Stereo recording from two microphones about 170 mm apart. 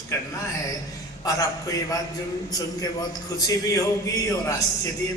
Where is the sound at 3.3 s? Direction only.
20° left (ahead or behind).